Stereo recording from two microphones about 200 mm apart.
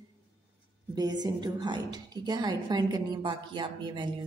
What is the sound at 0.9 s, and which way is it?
A woman's voice, 20° right (ahead or behind).